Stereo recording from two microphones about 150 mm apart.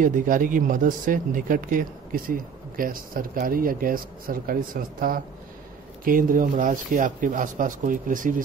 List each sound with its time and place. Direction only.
0.0 s speech: 60° right (ahead or behind)